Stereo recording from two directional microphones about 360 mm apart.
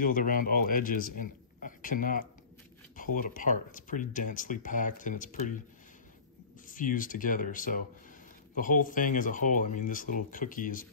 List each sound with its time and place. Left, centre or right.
0.0 s a man's voice: left
6.7 s speech: left